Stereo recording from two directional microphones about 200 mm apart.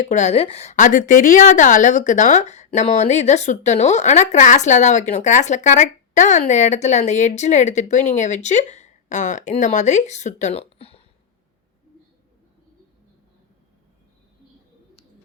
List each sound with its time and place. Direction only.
0.0 s a woman's voice: 35° left (ahead or behind)